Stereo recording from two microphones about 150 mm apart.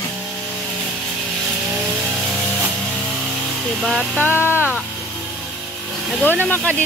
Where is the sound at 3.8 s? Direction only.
Centre (ahead or behind).